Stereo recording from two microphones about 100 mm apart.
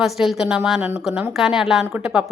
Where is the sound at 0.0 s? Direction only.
Centre (ahead or behind).